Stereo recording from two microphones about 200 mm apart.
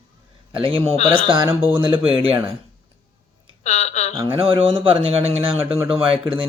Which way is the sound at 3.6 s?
35° left (ahead or behind).